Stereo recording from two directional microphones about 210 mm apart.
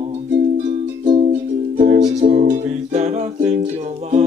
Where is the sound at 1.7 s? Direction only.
30° right (ahead or behind).